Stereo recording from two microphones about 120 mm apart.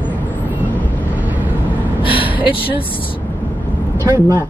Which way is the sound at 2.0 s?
45° left (ahead or behind).